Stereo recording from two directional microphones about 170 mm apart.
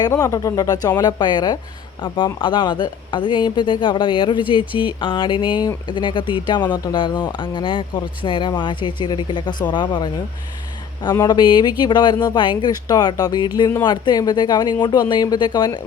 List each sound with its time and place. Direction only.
0.0 s speech: 20° left (ahead or behind)